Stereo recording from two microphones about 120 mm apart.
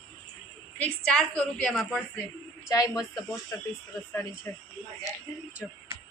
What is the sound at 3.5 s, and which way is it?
Speech, 25° left (ahead or behind).